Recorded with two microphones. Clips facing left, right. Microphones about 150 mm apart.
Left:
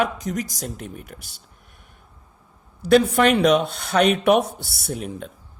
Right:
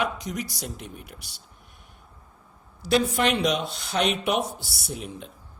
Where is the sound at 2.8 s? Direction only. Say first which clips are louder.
Left 7 dB; 50° left (ahead or behind).